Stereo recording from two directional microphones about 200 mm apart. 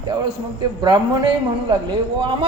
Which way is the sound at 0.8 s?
20° right (ahead or behind).